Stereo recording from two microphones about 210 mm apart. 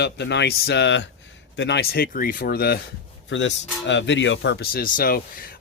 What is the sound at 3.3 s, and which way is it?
Speech, 60° left (ahead or behind).